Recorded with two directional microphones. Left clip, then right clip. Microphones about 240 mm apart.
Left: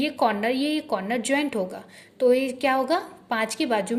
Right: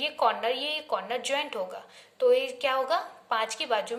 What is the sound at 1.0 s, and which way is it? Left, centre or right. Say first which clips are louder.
Speech: left 5 dB; left.